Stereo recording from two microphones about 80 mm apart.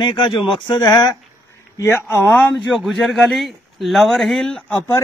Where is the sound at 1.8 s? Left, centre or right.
Left.